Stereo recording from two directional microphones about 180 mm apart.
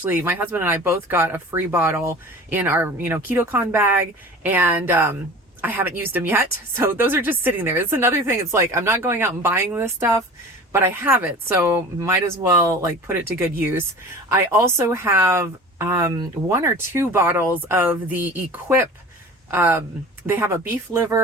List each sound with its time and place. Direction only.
0.0 s speech: 10° right (ahead or behind)